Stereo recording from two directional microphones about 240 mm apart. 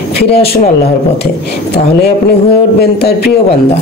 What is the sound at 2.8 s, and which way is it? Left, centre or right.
Speech, left.